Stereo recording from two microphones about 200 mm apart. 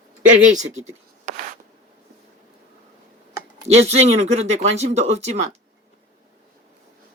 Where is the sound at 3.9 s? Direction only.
35° right (ahead or behind).